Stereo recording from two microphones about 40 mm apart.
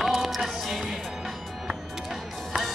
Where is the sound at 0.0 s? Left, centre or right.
Centre.